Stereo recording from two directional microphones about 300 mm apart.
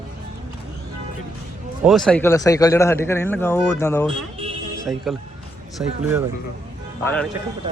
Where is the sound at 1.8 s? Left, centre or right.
Centre.